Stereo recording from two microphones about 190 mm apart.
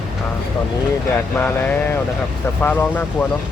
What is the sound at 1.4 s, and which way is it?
Speech, 10° left (ahead or behind).